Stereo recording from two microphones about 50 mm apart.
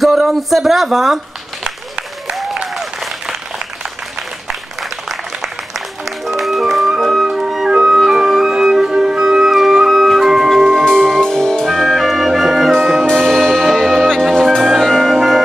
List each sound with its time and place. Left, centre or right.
0.0 s speech: centre
1.6 s applause: centre
2.3 s applause: centre
4.5 s applause: centre
7.2 s music: centre
10.5 s music: centre